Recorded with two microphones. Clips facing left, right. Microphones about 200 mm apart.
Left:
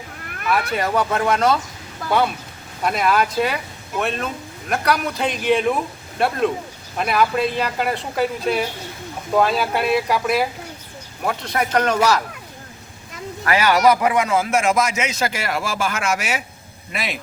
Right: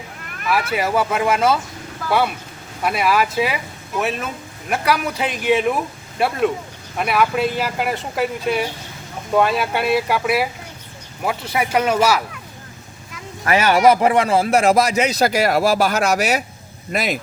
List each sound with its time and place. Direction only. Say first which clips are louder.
0.5 s speech: right 1 dB; 5° right (ahead or behind)
13.4 s speech: right 2 dB; 25° right (ahead or behind); by 17.2 s 40° right (ahead or behind)